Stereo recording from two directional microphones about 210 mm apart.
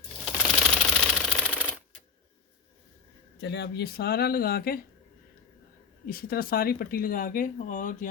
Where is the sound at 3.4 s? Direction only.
55° left (ahead or behind).